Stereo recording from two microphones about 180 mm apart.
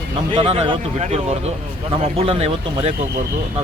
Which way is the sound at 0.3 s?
30° right (ahead or behind).